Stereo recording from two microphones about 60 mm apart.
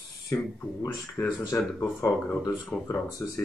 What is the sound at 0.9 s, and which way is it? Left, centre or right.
Speech, left.